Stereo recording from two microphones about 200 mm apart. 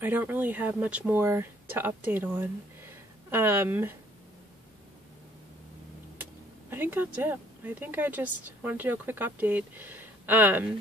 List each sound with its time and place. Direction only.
0.0 s speech: 10° right (ahead or behind)
6.7 s speech: 10° right (ahead or behind)